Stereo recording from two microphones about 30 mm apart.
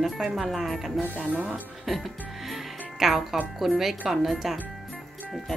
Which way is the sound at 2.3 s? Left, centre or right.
Centre.